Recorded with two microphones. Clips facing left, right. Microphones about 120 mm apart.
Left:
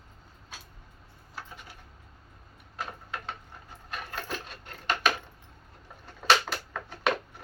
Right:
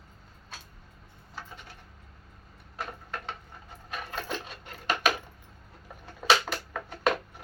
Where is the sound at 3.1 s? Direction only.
Centre (ahead or behind).